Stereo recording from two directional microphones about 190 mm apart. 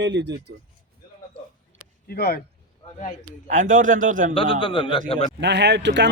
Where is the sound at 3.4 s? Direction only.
40° right (ahead or behind).